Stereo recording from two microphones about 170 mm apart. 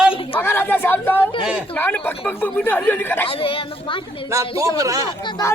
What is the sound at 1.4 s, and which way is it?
Speech, 5° right (ahead or behind).